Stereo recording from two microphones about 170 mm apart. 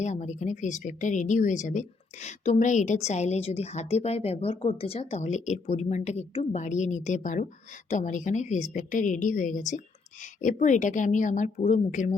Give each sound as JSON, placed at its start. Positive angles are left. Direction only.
{"t": 0.0, "sound": "speech", "side_deg": 45}